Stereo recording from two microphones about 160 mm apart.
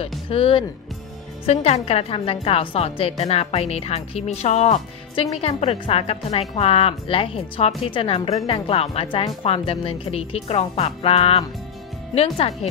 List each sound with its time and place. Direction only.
0.3 s a woman's voice: 35° left (ahead or behind)